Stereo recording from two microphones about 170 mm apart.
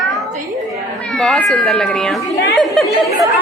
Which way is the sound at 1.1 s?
5° left (ahead or behind).